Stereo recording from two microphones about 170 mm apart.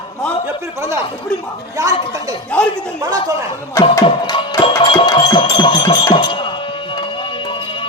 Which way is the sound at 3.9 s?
25° left (ahead or behind).